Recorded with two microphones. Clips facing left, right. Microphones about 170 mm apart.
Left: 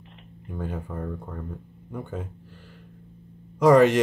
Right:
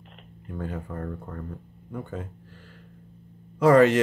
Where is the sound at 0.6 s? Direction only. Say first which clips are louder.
Left 1 dB; 10° left (ahead or behind).